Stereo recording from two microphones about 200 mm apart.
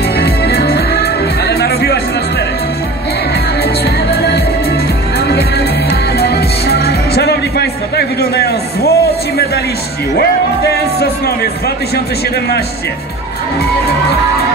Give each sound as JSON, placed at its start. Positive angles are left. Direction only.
{"t": 0.2, "sound": "music", "side_deg": 50}
{"t": 3.8, "sound": "music", "side_deg": 55}
{"t": 6.1, "sound": "music", "side_deg": 50}